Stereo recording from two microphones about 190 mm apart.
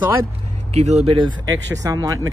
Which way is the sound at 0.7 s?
35° right (ahead or behind).